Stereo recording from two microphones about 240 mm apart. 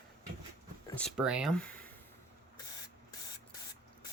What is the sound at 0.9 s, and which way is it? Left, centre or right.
Speech, centre.